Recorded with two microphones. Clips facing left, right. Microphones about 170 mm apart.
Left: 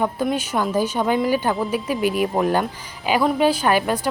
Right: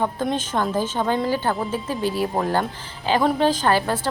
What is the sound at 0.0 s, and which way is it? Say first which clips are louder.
Speech: left 2 dB; 10° left (ahead or behind).